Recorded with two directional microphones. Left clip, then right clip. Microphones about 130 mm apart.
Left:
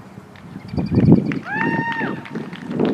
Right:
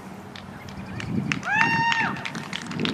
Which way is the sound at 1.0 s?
40° right (ahead or behind).